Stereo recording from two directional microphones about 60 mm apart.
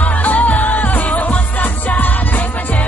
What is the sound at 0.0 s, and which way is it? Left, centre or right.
Music, left.